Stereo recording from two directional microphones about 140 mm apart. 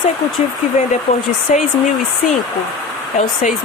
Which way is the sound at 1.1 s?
50° left (ahead or behind).